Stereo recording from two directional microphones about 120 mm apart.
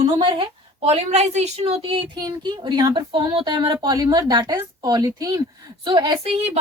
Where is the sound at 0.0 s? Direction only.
45° right (ahead or behind).